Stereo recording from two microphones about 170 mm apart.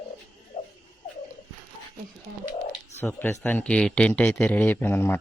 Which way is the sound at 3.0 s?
10° left (ahead or behind).